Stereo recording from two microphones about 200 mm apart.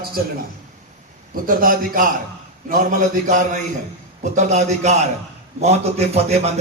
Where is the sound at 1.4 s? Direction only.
45° right (ahead or behind).